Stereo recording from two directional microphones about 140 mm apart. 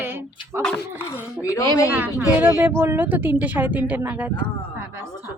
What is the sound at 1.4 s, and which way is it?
Speech, 25° left (ahead or behind).